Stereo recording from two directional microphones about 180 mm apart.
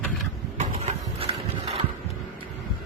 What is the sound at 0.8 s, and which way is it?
Horse, 35° right (ahead or behind).